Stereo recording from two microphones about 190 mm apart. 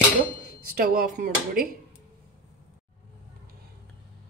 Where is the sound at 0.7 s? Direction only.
50° right (ahead or behind).